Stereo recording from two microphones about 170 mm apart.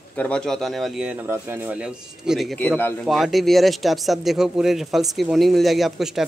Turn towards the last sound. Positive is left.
turn(degrees=0)  # may be behind; listen again after turning